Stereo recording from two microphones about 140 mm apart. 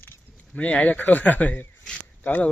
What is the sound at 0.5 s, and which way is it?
Speech, 10° left (ahead or behind).